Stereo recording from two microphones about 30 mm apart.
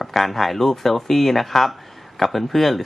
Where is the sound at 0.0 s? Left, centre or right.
Centre.